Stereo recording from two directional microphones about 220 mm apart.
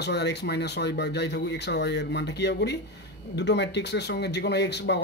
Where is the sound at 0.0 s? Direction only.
50° left (ahead or behind).